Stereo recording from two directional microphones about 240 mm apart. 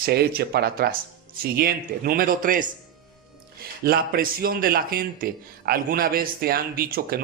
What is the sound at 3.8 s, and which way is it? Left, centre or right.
Speech, right.